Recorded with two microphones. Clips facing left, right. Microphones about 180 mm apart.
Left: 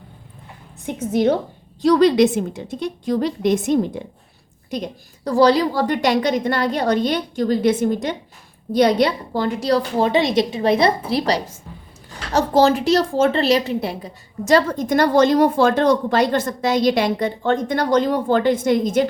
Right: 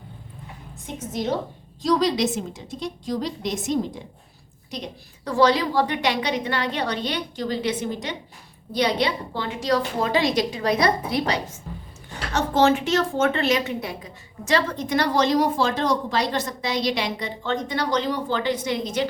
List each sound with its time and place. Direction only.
1.8 s a woman's voice: 60° left (ahead or behind)
5.2 s a woman's voice: 35° left (ahead or behind)